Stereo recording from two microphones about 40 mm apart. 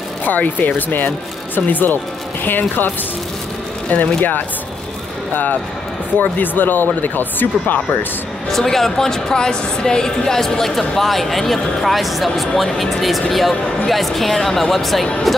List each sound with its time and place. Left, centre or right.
0.2 s speech: left
3.9 s speech: left
8.5 s a woman's voice: centre